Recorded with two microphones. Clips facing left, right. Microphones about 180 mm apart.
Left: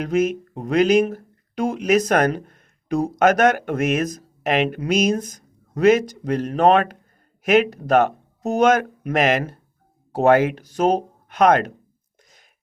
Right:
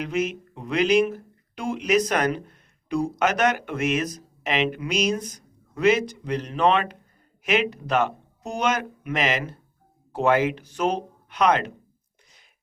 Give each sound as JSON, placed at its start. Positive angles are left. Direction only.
{"t": 0.0, "sound": "speech", "side_deg": 45}